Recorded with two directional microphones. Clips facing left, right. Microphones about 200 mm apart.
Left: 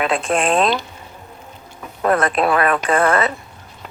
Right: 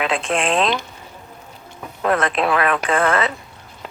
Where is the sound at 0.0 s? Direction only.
40° left (ahead or behind).